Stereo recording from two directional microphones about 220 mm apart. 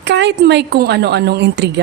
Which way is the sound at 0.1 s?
50° right (ahead or behind).